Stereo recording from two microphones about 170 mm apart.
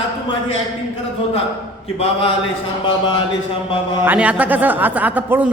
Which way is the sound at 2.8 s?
25° left (ahead or behind).